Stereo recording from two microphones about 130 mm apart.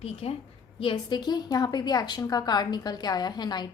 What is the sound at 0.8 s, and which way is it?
A woman's voice, 40° left (ahead or behind).